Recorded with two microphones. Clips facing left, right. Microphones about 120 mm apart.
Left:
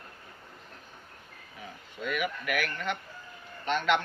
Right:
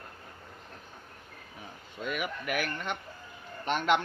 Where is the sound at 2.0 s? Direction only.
30° right (ahead or behind).